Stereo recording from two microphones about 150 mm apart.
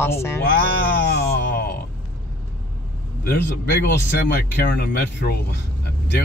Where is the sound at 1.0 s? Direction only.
90° left.